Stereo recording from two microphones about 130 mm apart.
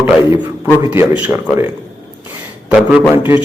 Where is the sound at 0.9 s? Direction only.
15° right (ahead or behind).